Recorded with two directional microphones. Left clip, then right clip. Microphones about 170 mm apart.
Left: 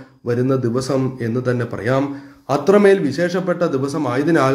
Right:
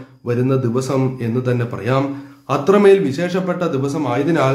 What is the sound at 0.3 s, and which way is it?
A man's voice, 20° left (ahead or behind).